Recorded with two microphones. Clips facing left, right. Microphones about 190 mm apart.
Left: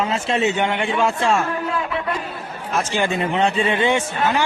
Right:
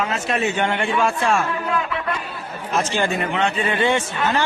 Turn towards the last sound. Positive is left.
turn(degrees=15)  # may be behind; listen again after turning